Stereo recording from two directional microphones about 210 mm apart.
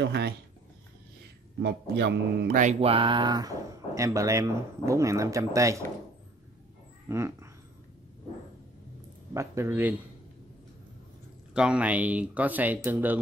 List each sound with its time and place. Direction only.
0.0 s speech: 50° right (ahead or behind)
1.6 s a man's voice: 55° right (ahead or behind)
2.6 s speech: 25° right (ahead or behind)
7.1 s speech: 15° right (ahead or behind)
9.3 s speech: 15° right (ahead or behind)
11.5 s speech: 5° right (ahead or behind)